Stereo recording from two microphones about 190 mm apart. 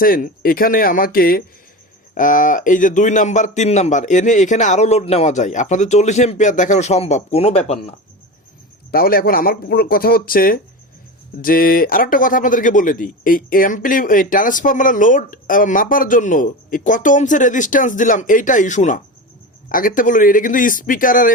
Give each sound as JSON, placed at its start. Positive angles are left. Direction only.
{"t": 0.0, "sound": "a man's voice", "side_deg": 50}
{"t": 8.9, "sound": "speech", "side_deg": 50}